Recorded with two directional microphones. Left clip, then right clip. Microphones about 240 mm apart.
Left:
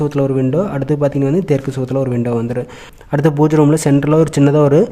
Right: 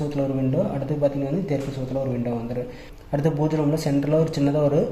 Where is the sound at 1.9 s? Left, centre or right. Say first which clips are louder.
Left 8 dB; left.